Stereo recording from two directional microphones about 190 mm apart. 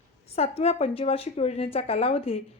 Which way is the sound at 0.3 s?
30° left (ahead or behind).